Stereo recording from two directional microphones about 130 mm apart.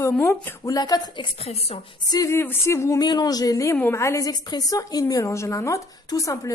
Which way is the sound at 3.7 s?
15° left (ahead or behind).